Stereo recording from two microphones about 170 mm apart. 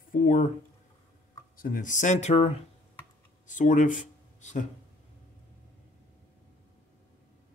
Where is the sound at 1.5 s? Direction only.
55° left (ahead or behind).